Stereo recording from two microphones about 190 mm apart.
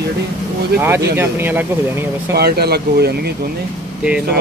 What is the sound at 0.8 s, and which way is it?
Speech, 10° right (ahead or behind).